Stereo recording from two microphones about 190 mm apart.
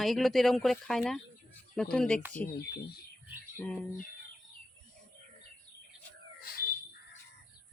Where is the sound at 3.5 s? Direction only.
10° left (ahead or behind).